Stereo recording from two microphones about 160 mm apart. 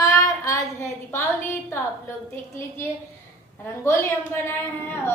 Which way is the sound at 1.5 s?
15° left (ahead or behind).